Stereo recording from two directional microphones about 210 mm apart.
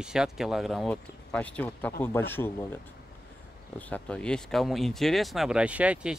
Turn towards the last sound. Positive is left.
turn(degrees=-5)  # may be behind; listen again after turning